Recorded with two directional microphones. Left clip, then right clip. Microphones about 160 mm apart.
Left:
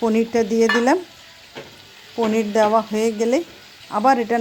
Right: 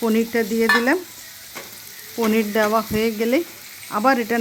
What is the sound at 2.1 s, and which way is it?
Sizzle, centre (ahead or behind).